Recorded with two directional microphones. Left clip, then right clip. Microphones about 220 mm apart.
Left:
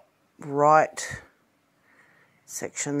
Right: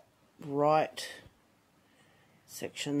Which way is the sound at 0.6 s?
15° left (ahead or behind).